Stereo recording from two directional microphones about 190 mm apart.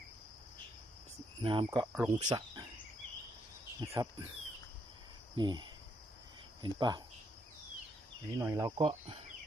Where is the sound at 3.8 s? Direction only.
20° right (ahead or behind).